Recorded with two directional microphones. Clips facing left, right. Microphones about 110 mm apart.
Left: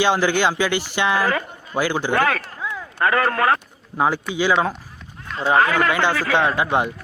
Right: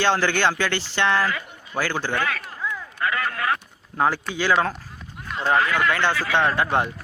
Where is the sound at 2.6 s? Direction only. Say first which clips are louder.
Right 2 dB; 15° left (ahead or behind).